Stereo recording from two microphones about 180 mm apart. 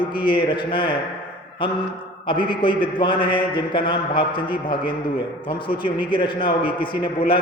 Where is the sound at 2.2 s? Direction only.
25° left (ahead or behind).